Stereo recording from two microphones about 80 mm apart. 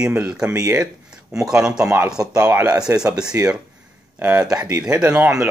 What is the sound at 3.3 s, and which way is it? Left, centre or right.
Speech, right.